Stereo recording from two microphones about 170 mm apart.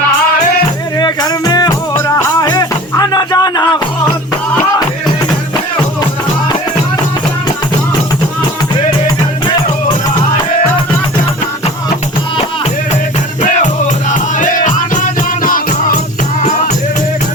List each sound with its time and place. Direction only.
0.9 s music: 25° left (ahead or behind)
13.4 s music: 45° left (ahead or behind)